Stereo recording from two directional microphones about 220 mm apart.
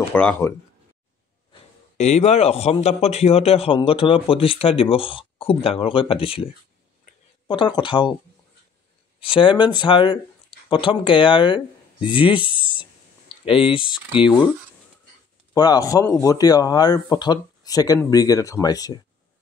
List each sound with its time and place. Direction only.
0.1 s speech: 5° left (ahead or behind)
1.5 s a man's voice: 30° left (ahead or behind)
9.2 s a man's voice: 25° left (ahead or behind)
15.5 s speech: 15° left (ahead or behind)